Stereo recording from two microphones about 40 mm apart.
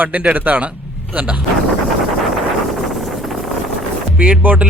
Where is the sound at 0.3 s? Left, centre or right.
Right.